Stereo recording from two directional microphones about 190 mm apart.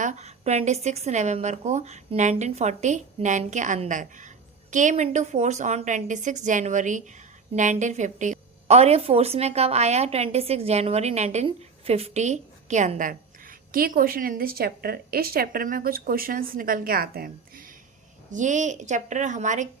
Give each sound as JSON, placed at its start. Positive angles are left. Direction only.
{"t": 0.0, "sound": "a woman's voice", "side_deg": -35}